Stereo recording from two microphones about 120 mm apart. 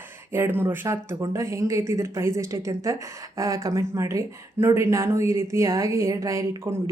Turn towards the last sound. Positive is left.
turn(degrees=-25)  # may be behind; listen again after turning